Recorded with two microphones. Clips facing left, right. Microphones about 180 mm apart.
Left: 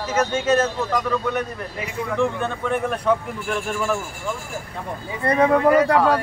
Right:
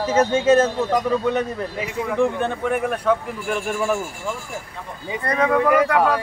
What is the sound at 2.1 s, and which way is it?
Speech, 15° right (ahead or behind).